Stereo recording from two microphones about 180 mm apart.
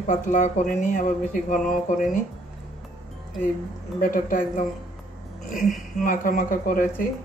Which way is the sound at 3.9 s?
50° left (ahead or behind).